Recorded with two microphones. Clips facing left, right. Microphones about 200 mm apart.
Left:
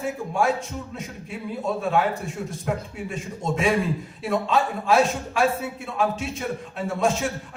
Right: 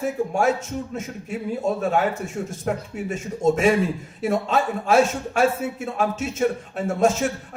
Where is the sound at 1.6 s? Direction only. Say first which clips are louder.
Right 1 dB; 45° right (ahead or behind).